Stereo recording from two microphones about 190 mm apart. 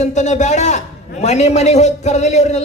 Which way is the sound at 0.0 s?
40° left (ahead or behind).